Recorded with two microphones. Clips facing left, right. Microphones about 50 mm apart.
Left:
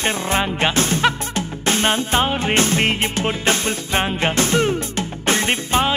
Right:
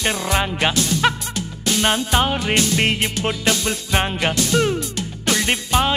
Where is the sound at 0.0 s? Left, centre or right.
Left.